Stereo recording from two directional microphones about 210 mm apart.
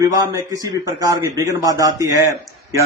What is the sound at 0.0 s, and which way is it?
Speech, 15° right (ahead or behind).